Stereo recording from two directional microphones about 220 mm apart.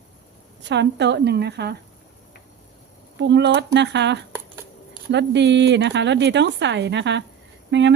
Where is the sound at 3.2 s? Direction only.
50° right (ahead or behind).